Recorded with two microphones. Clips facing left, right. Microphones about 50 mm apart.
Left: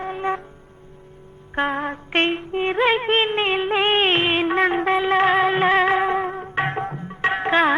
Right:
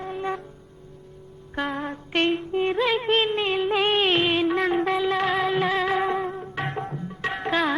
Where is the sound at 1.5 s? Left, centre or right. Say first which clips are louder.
Left 5 dB; left.